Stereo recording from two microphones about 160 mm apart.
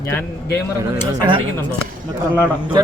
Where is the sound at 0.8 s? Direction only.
25° right (ahead or behind).